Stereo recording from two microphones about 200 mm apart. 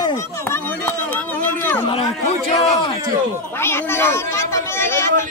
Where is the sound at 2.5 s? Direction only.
30° left (ahead or behind).